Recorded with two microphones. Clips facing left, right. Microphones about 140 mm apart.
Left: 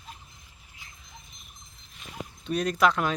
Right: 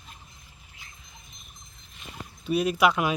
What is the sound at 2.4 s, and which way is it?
Speech, 5° right (ahead or behind).